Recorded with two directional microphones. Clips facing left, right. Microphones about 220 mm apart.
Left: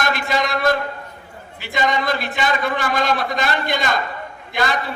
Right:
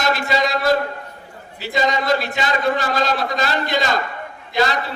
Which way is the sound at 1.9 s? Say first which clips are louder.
Right 2 dB; 55° left (ahead or behind).